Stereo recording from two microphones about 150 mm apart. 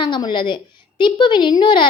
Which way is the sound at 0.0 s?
30° left (ahead or behind).